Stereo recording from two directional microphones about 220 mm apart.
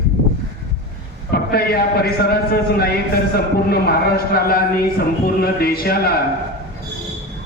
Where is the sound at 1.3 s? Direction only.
45° left (ahead or behind).